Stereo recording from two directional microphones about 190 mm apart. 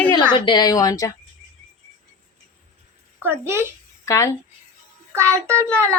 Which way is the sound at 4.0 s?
15° left (ahead or behind).